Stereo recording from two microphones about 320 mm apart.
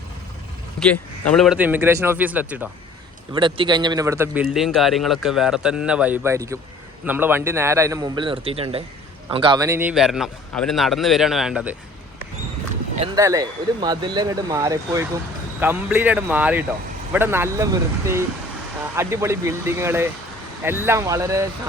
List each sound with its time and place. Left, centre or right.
0.8 s a man's voice: centre
13.0 s a man's voice: centre